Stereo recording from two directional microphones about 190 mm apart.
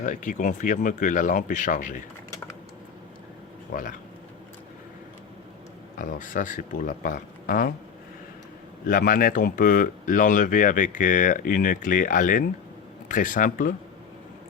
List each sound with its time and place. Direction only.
0.0 s speech: 40° left (ahead or behind)
3.7 s speech: 45° left (ahead or behind)
6.0 s speech: 45° left (ahead or behind)
8.9 s speech: 45° left (ahead or behind)